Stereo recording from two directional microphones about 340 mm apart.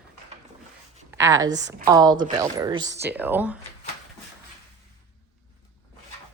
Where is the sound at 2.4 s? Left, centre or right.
Centre.